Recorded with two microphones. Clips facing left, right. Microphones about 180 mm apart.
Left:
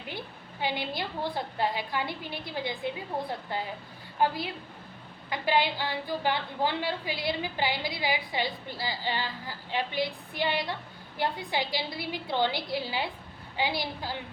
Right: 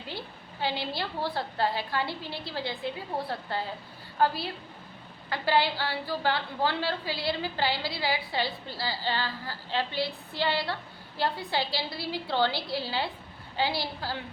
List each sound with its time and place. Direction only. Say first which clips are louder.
0.6 s a woman's voice: even; 15° left (ahead or behind)